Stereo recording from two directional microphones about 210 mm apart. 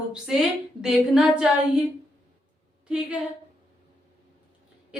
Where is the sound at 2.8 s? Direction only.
5° right (ahead or behind).